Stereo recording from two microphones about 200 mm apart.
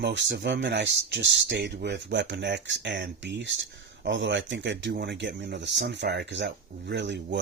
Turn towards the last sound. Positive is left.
turn(degrees=-60)  # may be behind; listen again after turning